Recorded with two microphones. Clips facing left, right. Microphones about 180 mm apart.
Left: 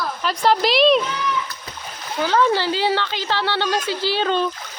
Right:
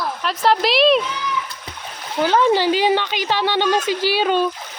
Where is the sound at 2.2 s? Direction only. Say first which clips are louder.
Right 3 dB; 20° right (ahead or behind).